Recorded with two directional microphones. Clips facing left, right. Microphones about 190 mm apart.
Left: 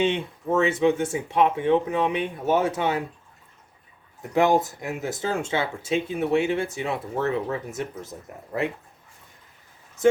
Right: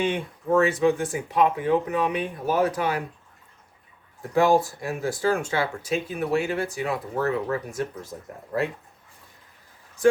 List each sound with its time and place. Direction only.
0.6 s speech: 25° left (ahead or behind)
4.4 s speech: 20° left (ahead or behind)
10.0 s speech: 20° left (ahead or behind)